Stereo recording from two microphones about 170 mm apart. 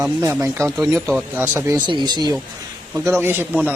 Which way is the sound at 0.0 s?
20° right (ahead or behind).